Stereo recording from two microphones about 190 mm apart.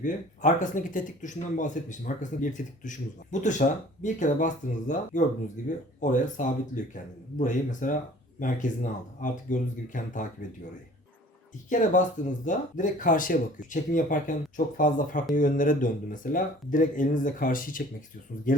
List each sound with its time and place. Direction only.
0.0 s speech: 40° left (ahead or behind)
11.7 s speech: 40° left (ahead or behind)